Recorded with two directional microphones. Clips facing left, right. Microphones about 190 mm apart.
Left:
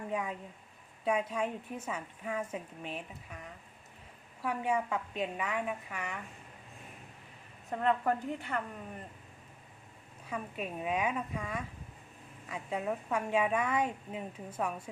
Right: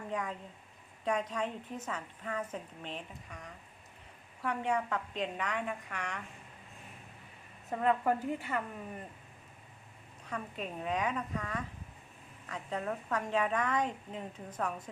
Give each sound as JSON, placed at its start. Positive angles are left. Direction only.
{"t": 0.1, "sound": "a woman's voice", "side_deg": 10}
{"t": 7.7, "sound": "a woman's voice", "side_deg": -5}
{"t": 10.2, "sound": "a woman's voice", "side_deg": 10}